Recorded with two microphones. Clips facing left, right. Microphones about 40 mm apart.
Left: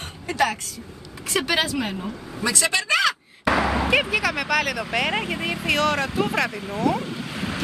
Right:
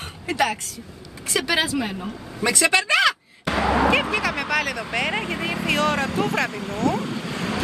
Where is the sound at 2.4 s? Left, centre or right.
Right.